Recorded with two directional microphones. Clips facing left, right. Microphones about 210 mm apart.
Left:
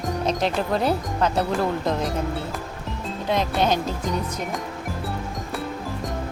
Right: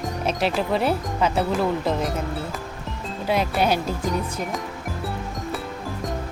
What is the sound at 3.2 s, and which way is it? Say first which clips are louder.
Speech: right 1 dB; 5° right (ahead or behind).